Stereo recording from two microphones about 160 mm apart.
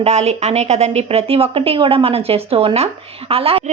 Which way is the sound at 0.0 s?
45° right (ahead or behind).